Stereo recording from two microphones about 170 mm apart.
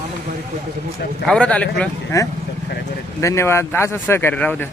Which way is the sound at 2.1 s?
20° left (ahead or behind).